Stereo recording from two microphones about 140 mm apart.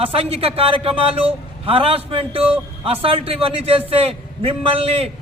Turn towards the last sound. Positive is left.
turn(degrees=-45)  # may be behind; listen again after turning